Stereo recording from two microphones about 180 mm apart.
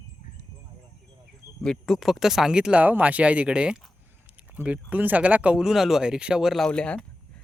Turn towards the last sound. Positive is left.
turn(degrees=5)  # may be behind; listen again after turning